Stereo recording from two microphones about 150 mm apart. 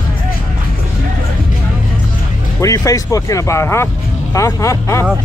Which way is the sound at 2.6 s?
20° left (ahead or behind).